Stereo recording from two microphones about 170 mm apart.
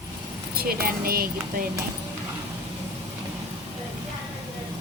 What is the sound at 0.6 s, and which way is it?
Speech, 60° right (ahead or behind).